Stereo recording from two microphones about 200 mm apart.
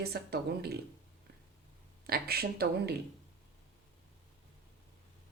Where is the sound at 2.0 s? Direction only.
50° right (ahead or behind).